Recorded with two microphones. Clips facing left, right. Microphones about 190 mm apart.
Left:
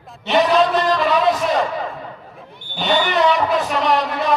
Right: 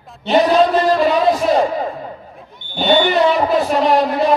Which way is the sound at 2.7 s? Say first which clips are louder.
Right 4 dB; 35° right (ahead or behind).